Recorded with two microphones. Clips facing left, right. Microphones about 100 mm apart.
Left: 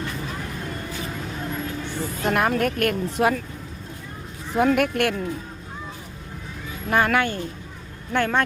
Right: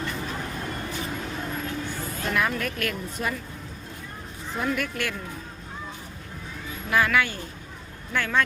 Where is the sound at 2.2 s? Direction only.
50° left (ahead or behind).